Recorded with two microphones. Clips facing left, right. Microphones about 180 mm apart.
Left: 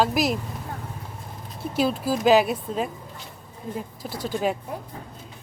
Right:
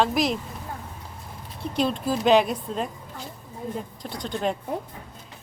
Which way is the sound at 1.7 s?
5° left (ahead or behind).